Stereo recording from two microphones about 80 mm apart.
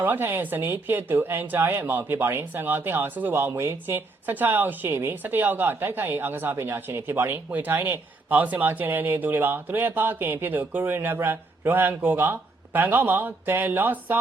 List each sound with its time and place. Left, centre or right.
0.0 s a woman's voice: right